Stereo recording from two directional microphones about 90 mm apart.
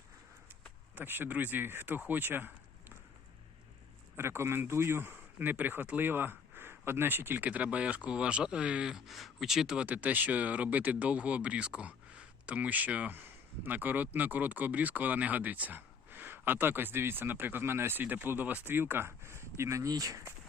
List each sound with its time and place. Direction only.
0.9 s speech: 25° right (ahead or behind)
4.2 s speech: 30° right (ahead or behind); by 9.8 s 5° right (ahead or behind)
9.8 s speech: 20° right (ahead or behind); by 20.3 s 40° right (ahead or behind)